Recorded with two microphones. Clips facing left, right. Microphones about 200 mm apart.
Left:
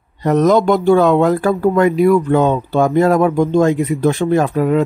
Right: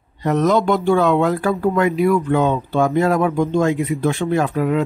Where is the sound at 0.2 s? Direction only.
40° left (ahead or behind).